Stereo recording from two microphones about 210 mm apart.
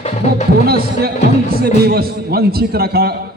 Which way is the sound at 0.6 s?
45° right (ahead or behind).